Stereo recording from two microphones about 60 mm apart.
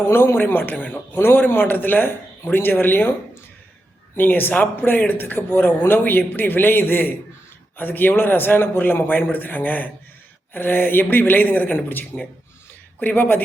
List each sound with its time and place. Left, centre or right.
0.1 s speech: left
4.1 s speech: left